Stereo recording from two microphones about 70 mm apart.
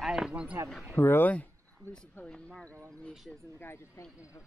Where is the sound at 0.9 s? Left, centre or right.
Left.